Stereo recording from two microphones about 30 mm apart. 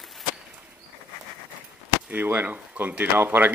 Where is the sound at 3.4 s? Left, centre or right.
Right.